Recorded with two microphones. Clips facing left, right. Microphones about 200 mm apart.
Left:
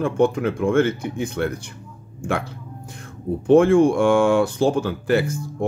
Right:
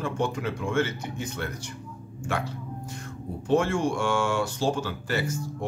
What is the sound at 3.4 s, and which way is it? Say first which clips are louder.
Speech: left 10 dB; 55° left (ahead or behind).